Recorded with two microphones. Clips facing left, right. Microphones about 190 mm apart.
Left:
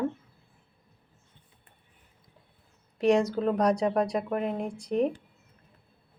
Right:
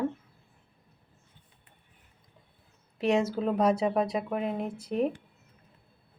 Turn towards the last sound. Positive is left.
turn(degrees=-5)  # may be behind; listen again after turning